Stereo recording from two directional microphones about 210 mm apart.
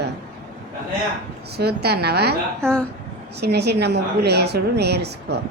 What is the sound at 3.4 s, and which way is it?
A woman's voice, 50° right (ahead or behind).